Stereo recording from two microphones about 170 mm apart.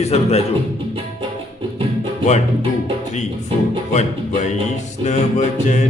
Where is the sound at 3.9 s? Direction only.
45° left (ahead or behind).